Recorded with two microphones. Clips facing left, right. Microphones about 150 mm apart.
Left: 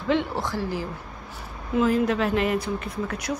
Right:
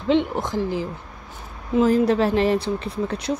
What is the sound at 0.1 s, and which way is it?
Speech, 20° right (ahead or behind).